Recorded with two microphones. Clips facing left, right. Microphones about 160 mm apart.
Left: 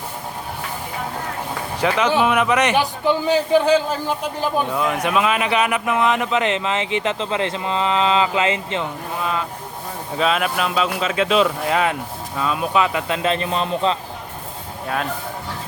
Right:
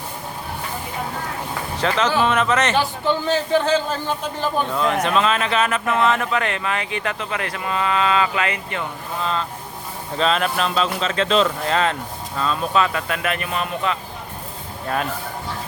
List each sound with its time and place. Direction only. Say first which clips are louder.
1.8 s a man's voice: left 2 dB; 10° left (ahead or behind)
9.2 s a man's voice: even; 10° left (ahead or behind); by 14.0 s 25° left (ahead or behind)